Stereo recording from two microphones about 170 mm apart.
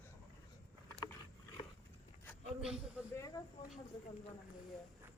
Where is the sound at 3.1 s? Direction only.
20° left (ahead or behind).